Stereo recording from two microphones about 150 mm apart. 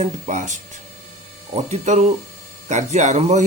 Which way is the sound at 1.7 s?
50° right (ahead or behind).